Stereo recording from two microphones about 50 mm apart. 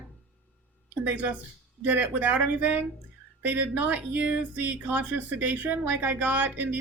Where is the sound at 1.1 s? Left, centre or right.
Right.